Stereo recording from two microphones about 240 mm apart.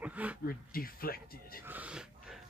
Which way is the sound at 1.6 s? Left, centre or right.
Centre.